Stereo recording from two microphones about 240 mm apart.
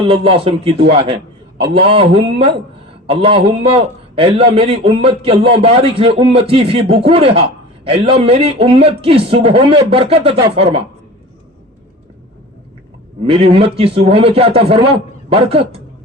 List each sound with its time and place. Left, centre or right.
0.1 s a man's voice: right
13.2 s a man's voice: right